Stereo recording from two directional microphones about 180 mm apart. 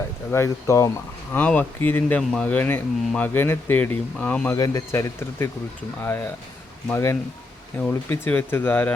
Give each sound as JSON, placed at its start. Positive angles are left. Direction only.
{"t": 0.3, "sound": "speech", "side_deg": 15}
{"t": 4.5, "sound": "speech", "side_deg": 20}